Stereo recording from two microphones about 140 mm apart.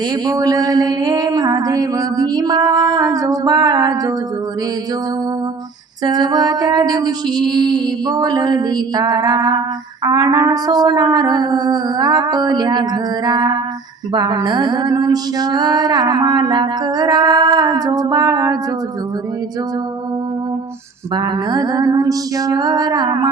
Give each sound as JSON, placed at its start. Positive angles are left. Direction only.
{"t": 0.3, "sound": "music", "side_deg": -25}
{"t": 6.1, "sound": "music", "side_deg": -30}
{"t": 21.2, "sound": "music", "side_deg": -30}